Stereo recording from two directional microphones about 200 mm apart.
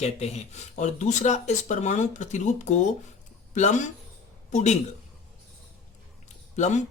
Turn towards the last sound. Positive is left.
turn(degrees=35)  # may be behind; listen again after turning